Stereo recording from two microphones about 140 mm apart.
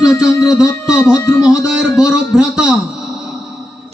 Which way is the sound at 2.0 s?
5° right (ahead or behind).